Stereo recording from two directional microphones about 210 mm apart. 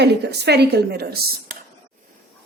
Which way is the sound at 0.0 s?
50° right (ahead or behind).